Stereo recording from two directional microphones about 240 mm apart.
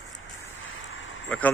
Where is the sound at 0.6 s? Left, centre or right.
Left.